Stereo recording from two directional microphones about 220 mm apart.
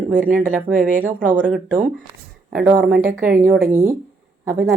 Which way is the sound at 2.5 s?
5° right (ahead or behind).